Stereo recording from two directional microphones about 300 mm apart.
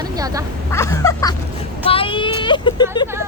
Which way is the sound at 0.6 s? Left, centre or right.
Centre.